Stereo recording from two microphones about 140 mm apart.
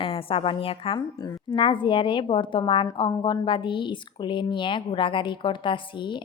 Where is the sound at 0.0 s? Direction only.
40° left (ahead or behind).